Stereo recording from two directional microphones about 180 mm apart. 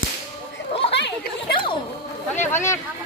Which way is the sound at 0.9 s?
70° left (ahead or behind).